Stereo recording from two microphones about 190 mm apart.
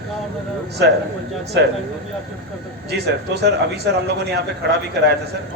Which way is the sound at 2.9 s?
60° right (ahead or behind).